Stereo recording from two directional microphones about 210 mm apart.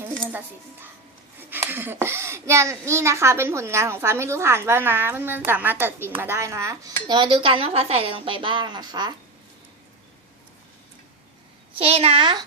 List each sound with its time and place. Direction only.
0.0 s music: 10° right (ahead or behind)
1.5 s a child's voice: 10° right (ahead or behind)
11.8 s speech: 30° right (ahead or behind)